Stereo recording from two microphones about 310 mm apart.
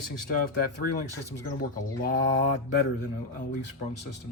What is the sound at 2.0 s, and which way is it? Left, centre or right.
Speech, left.